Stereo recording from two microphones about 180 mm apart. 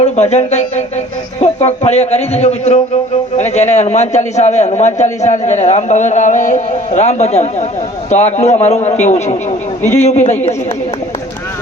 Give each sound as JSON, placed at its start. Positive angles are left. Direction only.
{"t": 0.0, "sound": "a man's voice", "side_deg": 35}